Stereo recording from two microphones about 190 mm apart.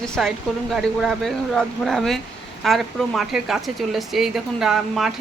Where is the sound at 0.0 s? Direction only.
Centre (ahead or behind).